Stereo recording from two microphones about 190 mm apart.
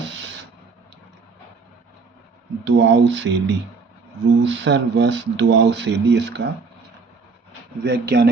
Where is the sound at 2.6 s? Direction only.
70° right (ahead or behind).